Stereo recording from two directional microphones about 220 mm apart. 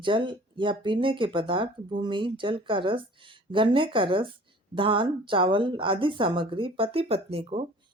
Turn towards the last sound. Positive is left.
turn(degrees=-30)  # may be behind; listen again after turning